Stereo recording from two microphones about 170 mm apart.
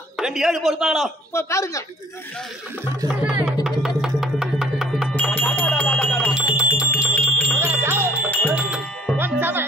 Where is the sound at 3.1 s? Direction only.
10° right (ahead or behind).